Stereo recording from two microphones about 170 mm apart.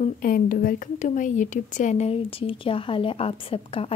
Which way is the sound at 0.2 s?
55° left (ahead or behind).